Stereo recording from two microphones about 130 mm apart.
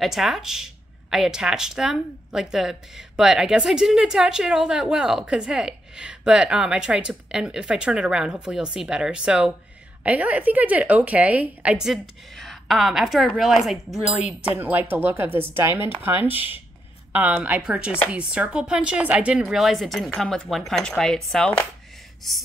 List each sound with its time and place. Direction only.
0.0 s a woman's voice: centre (ahead or behind)
14.6 s a woman's voice: 15° right (ahead or behind); by 21.5 s 5° left (ahead or behind)